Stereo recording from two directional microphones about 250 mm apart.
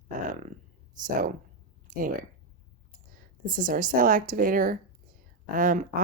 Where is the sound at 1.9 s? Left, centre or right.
Right.